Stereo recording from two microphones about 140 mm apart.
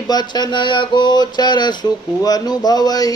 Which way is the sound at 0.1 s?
30° left (ahead or behind).